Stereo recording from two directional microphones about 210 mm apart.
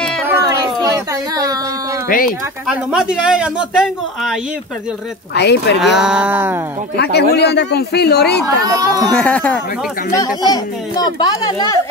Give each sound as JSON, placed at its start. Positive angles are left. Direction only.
{"t": 0.3, "sound": "a sound", "side_deg": -15}
{"t": 2.0, "sound": "speech", "side_deg": 40}
{"t": 2.6, "sound": "speech", "side_deg": -5}
{"t": 5.3, "sound": "speech", "side_deg": 55}
{"t": 5.8, "sound": "speech", "side_deg": 0}
{"t": 7.0, "sound": "speech", "side_deg": 50}
{"t": 8.5, "sound": "speech", "side_deg": -15}
{"t": 9.1, "sound": "speech", "side_deg": 5}
{"t": 10.1, "sound": "a child's voice", "side_deg": 15}